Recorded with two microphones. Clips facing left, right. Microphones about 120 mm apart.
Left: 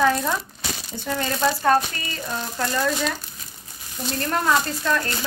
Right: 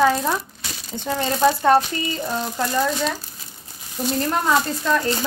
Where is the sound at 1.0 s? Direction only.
20° right (ahead or behind).